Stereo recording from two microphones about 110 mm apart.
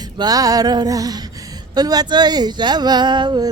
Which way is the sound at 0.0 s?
35° right (ahead or behind).